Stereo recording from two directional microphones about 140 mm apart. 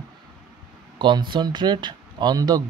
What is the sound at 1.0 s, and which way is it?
Speech, 35° right (ahead or behind).